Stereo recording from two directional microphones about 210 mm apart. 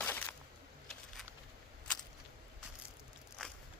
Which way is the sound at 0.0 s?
10° left (ahead or behind).